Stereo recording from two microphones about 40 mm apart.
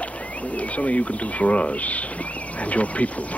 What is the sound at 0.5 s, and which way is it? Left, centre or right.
Speech, left.